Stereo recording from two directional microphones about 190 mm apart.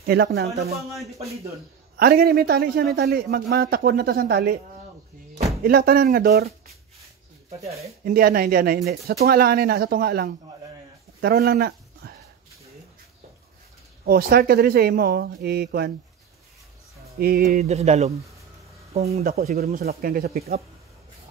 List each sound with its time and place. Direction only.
0.0 s speech: 55° right (ahead or behind)
0.7 s speech: centre (ahead or behind)
1.1 s speech: 35° right (ahead or behind)
2.0 s a man's voice: 55° right (ahead or behind)
5.6 s speech: 50° right (ahead or behind)
8.0 s a man's voice: 50° right (ahead or behind)
14.0 s a man's voice: 55° right (ahead or behind)
17.2 s speech: 55° right (ahead or behind)
17.6 s speech: 35° right (ahead or behind)
19.6 s speech: 55° right (ahead or behind)